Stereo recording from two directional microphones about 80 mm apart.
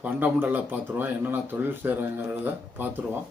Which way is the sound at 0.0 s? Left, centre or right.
Right.